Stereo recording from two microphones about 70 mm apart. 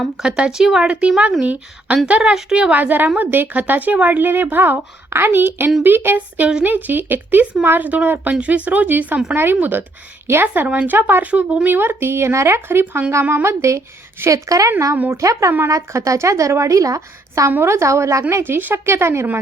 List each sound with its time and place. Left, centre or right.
0.2 s speech: centre
2.7 s speech: right
11.7 s a woman's voice: right
17.5 s a woman's voice: right
18.4 s speech: right